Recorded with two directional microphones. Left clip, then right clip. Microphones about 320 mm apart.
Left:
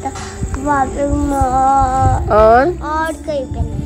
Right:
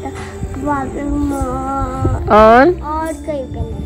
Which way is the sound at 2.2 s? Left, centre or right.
Right.